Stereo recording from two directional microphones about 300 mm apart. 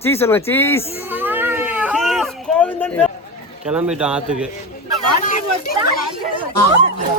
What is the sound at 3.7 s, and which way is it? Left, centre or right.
Speech, centre.